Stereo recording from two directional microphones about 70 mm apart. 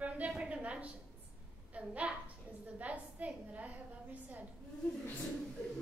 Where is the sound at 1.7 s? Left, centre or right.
Centre.